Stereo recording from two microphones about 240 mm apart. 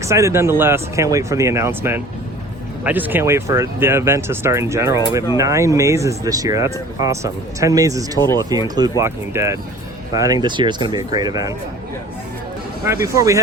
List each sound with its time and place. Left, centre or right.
0.0 s speech: centre
12.8 s speech: centre